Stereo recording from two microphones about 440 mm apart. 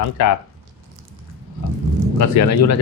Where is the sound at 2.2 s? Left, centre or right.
Left.